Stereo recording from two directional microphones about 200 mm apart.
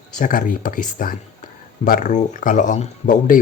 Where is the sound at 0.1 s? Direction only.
40° left (ahead or behind).